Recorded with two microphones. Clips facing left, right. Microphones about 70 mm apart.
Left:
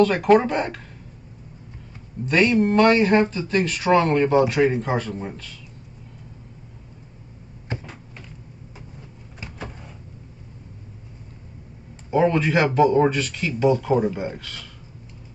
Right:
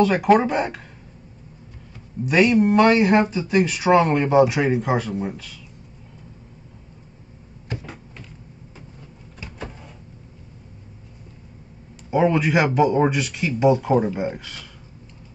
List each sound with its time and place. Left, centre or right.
0.0 s speech: centre
2.2 s speech: centre
7.7 s cupboard open or close: left
12.1 s speech: centre